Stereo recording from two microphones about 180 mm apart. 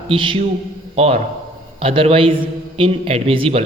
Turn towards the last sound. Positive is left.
turn(degrees=-30)  # may be behind; listen again after turning